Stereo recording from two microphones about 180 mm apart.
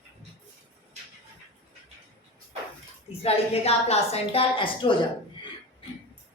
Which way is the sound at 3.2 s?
35° left (ahead or behind).